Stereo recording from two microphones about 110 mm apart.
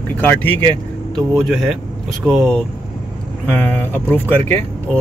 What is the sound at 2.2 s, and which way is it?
Speech, 10° left (ahead or behind).